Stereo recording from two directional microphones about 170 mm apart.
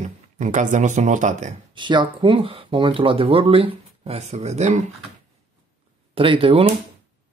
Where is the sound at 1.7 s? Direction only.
25° right (ahead or behind).